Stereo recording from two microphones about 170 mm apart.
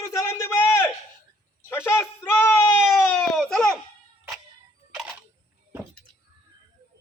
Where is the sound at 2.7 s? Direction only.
5° right (ahead or behind).